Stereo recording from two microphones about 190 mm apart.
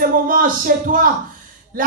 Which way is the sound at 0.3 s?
45° right (ahead or behind).